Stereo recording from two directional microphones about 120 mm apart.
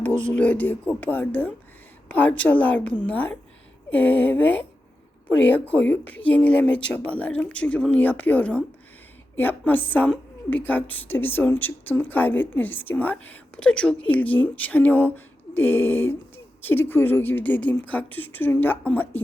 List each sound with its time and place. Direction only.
0.0 s a woman's voice: 10° left (ahead or behind)